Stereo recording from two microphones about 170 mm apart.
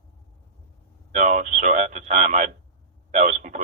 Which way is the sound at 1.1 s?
45° right (ahead or behind).